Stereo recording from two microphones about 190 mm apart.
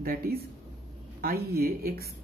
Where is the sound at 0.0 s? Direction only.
50° right (ahead or behind).